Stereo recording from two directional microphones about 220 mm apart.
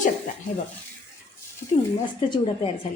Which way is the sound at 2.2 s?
25° left (ahead or behind).